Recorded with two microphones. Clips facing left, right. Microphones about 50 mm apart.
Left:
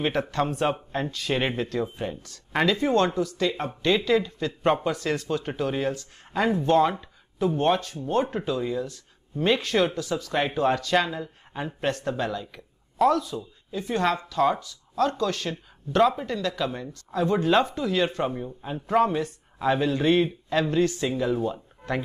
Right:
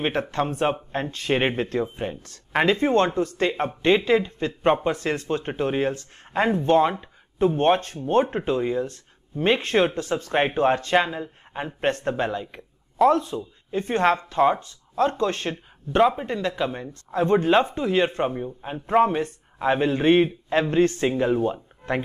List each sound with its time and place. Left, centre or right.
0.0 s speech: right